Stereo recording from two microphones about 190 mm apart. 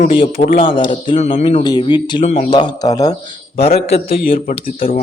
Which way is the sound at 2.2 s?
35° left (ahead or behind).